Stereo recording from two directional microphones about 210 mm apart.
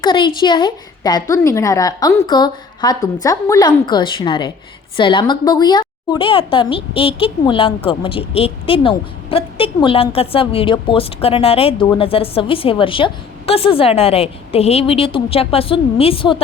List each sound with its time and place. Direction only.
0.0 s a woman's voice: 25° left (ahead or behind)